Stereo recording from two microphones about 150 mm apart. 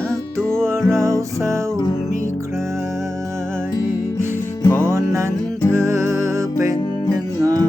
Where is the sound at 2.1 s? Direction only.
60° left (ahead or behind).